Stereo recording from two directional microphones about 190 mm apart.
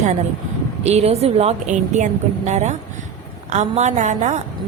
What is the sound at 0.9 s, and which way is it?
A woman's voice, 35° right (ahead or behind).